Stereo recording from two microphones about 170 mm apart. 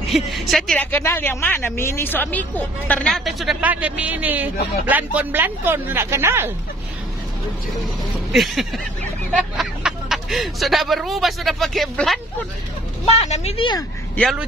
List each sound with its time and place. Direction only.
0.3 s speech: centre (ahead or behind); by 6.5 s 15° right (ahead or behind)
8.3 s a sound: centre (ahead or behind)
9.3 s speech: centre (ahead or behind)
13.0 s a woman's voice: 40° left (ahead or behind)